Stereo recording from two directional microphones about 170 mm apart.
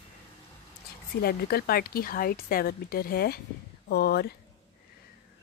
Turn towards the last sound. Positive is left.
turn(degrees=70)  # may be behind; listen again after turning